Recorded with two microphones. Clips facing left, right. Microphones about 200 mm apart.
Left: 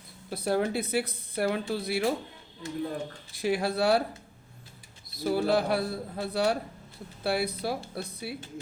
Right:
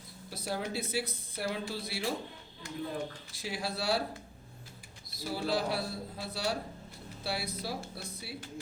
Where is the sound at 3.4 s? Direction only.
55° left (ahead or behind).